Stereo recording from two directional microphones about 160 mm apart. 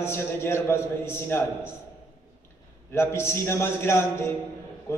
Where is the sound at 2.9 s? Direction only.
15° left (ahead or behind).